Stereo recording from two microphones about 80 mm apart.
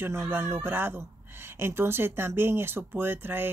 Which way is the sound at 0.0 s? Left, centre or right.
Right.